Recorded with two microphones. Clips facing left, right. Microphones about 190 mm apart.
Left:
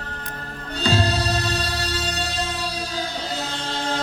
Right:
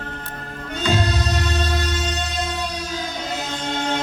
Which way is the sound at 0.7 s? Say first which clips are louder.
Even; 35° left (ahead or behind).